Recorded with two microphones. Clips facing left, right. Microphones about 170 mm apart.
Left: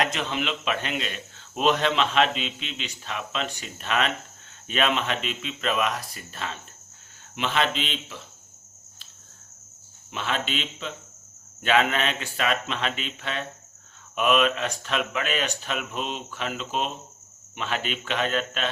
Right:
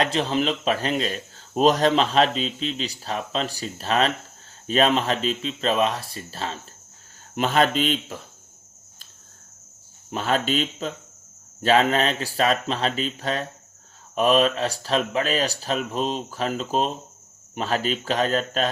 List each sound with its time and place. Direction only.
0.0 s speech: 35° right (ahead or behind)
7.3 s speech: 45° right (ahead or behind)
10.1 s speech: 40° right (ahead or behind)